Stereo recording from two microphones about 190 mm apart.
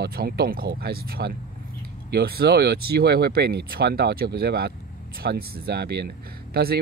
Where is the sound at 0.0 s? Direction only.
55° right (ahead or behind).